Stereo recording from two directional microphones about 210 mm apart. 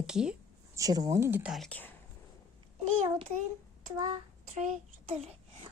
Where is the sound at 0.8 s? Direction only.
15° right (ahead or behind); by 2.0 s 5° left (ahead or behind).